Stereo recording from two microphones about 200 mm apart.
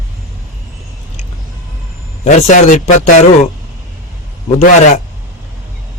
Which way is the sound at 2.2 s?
40° left (ahead or behind).